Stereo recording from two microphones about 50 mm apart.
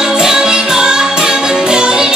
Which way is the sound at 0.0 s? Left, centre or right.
Centre.